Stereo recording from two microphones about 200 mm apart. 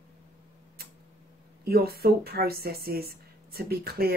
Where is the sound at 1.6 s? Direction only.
50° right (ahead or behind).